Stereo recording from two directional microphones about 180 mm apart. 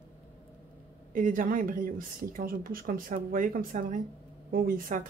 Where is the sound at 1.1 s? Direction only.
45° right (ahead or behind).